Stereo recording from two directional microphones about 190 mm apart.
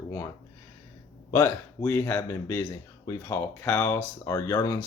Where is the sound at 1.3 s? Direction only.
15° left (ahead or behind).